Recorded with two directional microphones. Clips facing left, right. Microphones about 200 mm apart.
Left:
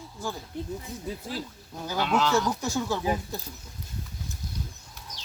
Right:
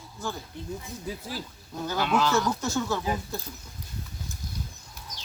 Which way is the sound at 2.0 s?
5° right (ahead or behind).